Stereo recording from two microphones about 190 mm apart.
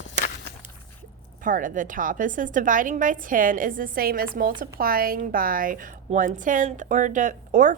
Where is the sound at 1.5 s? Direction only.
45° right (ahead or behind).